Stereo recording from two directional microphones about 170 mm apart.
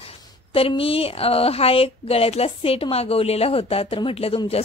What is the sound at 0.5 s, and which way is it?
A woman's voice, 30° left (ahead or behind).